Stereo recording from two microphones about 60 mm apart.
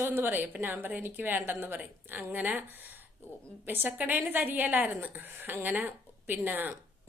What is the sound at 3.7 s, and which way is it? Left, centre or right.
A woman's voice, right.